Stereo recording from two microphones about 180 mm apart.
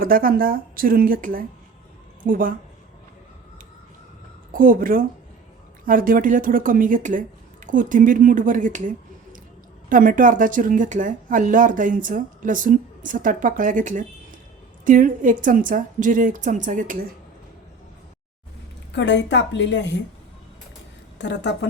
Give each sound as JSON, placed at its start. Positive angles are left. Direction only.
{"t": 0.0, "sound": "speech", "side_deg": -50}
{"t": 4.5, "sound": "speech", "side_deg": -50}
{"t": 9.9, "sound": "speech", "side_deg": -50}
{"t": 18.9, "sound": "a woman's voice", "side_deg": 80}
{"t": 21.2, "sound": "a woman's voice", "side_deg": 80}